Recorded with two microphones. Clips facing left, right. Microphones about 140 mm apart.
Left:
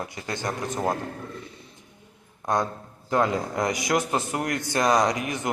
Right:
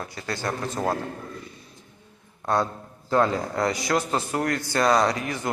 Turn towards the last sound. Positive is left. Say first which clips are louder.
# even
turn(degrees=20)  # may be behind; listen again after turning